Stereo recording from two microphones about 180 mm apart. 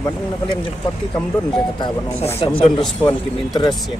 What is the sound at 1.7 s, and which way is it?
A man's voice, 25° left (ahead or behind).